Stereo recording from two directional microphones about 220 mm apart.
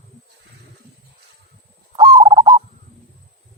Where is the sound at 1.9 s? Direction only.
15° right (ahead or behind).